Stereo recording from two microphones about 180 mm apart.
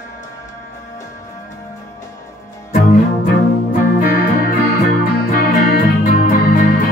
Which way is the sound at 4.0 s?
50° left (ahead or behind).